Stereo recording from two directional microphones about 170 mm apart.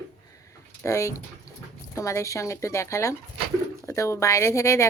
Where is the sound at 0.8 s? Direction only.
20° left (ahead or behind).